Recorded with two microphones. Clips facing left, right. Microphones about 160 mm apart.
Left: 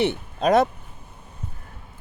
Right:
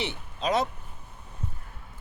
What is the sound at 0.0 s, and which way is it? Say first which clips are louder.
Speech: left 9 dB; 50° left (ahead or behind).